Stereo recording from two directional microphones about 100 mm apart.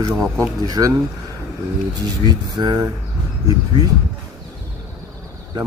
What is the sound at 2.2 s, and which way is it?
Speech, 45° right (ahead or behind).